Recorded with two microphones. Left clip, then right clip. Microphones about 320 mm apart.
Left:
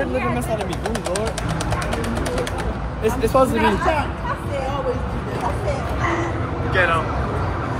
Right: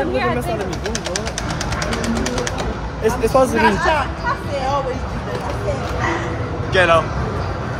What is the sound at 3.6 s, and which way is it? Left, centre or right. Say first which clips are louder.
Speech: right 3 dB; right.